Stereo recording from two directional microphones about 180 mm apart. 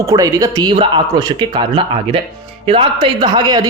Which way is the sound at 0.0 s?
20° right (ahead or behind).